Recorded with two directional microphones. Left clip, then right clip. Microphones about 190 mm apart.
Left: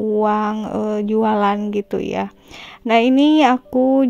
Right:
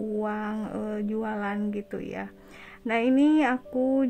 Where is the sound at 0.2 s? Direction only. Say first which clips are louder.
Left 13 dB; 30° left (ahead or behind).